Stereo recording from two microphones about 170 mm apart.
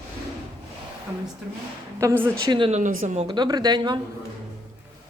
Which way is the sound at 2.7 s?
45° right (ahead or behind).